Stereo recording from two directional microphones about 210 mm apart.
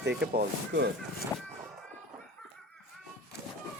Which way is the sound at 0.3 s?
55° right (ahead or behind).